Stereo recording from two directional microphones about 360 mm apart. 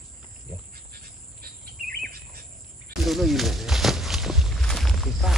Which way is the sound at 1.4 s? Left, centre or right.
Right.